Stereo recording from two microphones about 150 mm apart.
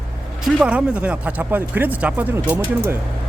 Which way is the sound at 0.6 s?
5° right (ahead or behind).